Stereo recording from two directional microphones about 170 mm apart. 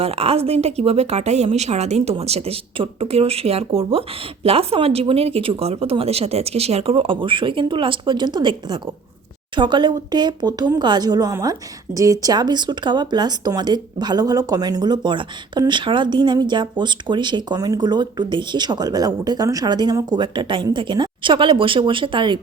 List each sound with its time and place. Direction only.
0.0 s speech: 35° right (ahead or behind)